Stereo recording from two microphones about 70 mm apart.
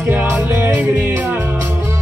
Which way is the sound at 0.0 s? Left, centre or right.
Right.